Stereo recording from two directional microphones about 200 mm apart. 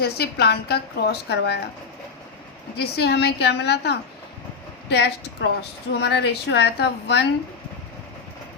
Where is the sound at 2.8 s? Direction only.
55° left (ahead or behind).